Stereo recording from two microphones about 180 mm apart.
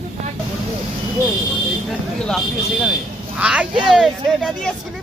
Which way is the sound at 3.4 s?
5° right (ahead or behind).